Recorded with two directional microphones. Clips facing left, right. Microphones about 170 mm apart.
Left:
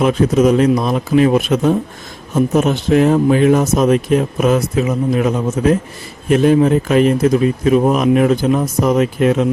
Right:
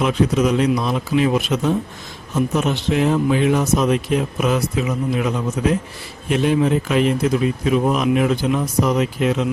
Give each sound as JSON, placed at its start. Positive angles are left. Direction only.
{"t": 0.0, "sound": "speech", "side_deg": 45}